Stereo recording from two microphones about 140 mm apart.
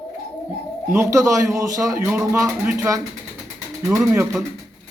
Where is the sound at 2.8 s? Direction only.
25° right (ahead or behind).